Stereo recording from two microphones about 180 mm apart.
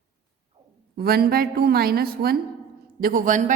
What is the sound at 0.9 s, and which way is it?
A woman's voice, 60° right (ahead or behind).